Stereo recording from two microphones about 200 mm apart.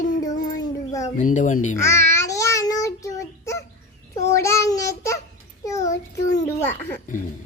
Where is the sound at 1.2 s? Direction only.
40° left (ahead or behind).